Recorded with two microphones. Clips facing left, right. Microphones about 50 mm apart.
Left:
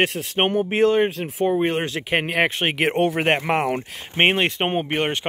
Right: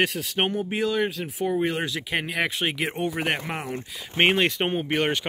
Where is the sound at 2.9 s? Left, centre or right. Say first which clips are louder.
Left 8 dB; left.